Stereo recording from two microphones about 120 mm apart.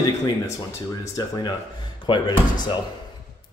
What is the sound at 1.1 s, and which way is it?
Speech, 35° left (ahead or behind).